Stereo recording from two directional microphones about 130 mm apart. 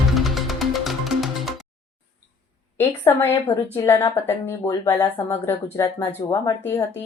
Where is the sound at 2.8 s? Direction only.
15° left (ahead or behind).